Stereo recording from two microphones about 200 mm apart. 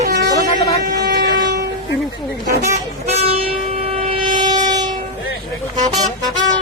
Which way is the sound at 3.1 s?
30° right (ahead or behind).